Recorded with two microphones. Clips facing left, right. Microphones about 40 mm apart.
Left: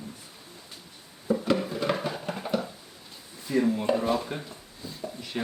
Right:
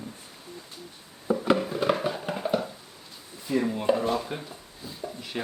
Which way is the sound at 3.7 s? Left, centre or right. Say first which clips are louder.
Even; centre.